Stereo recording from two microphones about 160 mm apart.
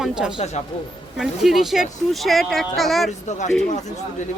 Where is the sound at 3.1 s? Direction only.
50° left (ahead or behind).